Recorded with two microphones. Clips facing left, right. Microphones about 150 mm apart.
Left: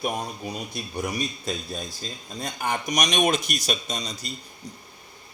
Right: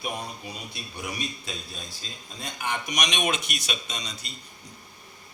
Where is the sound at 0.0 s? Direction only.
45° left (ahead or behind).